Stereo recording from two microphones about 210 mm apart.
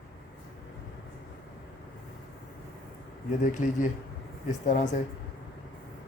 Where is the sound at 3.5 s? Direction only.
35° left (ahead or behind).